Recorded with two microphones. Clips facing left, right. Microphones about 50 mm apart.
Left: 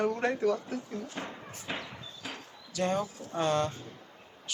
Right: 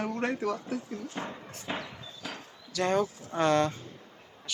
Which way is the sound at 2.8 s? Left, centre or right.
Right.